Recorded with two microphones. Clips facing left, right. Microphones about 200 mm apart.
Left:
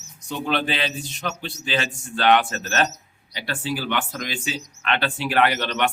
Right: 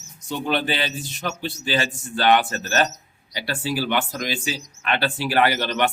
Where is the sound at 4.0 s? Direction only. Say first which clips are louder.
Right 3 dB; 40° right (ahead or behind).